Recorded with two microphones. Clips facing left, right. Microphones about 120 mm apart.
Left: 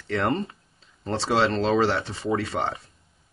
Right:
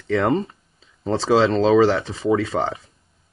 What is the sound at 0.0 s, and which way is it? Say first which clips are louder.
Speech: right 5 dB; centre (ahead or behind).